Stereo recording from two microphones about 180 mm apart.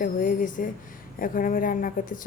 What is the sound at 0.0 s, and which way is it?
Speech, 50° left (ahead or behind).